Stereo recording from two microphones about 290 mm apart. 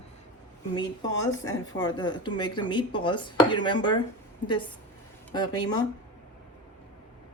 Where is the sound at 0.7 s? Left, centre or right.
Centre.